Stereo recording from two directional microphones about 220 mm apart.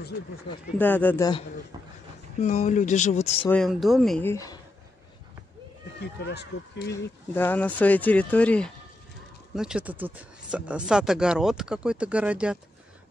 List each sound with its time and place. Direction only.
0.7 s speech: 5° left (ahead or behind)
2.4 s speech: 35° left (ahead or behind)
3.4 s speech: centre (ahead or behind)
5.9 s speech: 50° left (ahead or behind)
6.9 s speech: 10° left (ahead or behind)